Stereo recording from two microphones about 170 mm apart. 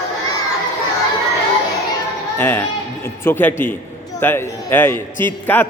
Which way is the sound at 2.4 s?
10° left (ahead or behind).